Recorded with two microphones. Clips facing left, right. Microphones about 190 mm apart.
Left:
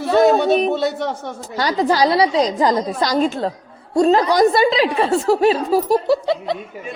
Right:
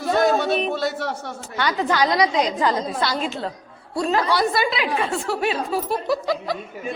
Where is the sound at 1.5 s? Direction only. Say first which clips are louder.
Left 4 dB; 35° left (ahead or behind).